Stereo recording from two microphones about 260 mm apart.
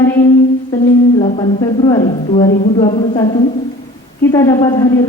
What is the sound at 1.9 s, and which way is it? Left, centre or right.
Speech, centre.